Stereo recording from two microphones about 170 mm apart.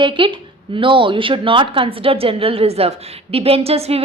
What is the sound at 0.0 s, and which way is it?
A woman's voice, 30° right (ahead or behind).